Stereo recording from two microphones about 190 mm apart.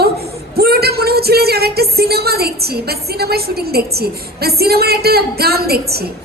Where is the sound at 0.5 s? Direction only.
55° right (ahead or behind).